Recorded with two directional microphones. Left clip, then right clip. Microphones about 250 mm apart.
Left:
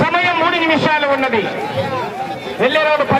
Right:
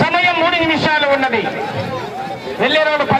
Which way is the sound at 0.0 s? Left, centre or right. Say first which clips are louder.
Right 1 dB; right.